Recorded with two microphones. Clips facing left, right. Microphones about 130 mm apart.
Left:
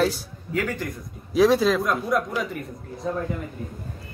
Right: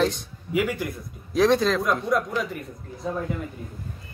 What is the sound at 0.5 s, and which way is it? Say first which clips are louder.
Speech: right 2 dB; 10° right (ahead or behind).